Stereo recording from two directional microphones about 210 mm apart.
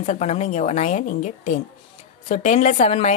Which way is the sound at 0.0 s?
30° left (ahead or behind).